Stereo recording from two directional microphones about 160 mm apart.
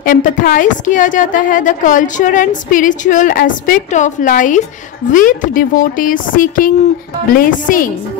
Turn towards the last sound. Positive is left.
turn(degrees=55)  # may be behind; listen again after turning